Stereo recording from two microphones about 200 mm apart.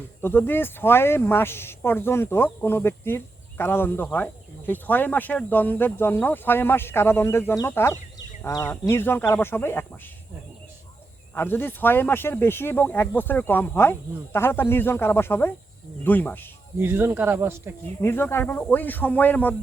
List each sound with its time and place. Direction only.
0.2 s speech: 10° left (ahead or behind)
11.3 s speech: 10° left (ahead or behind)
16.8 s speech: 10° right (ahead or behind)
18.0 s speech: 10° left (ahead or behind)